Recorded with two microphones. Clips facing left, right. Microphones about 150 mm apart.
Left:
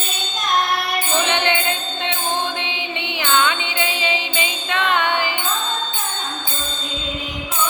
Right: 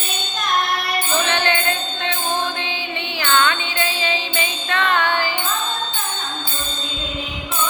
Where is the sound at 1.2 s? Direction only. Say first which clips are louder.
Left 1 dB; 20° left (ahead or behind).